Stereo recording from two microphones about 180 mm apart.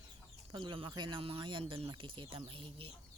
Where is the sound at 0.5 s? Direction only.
25° right (ahead or behind).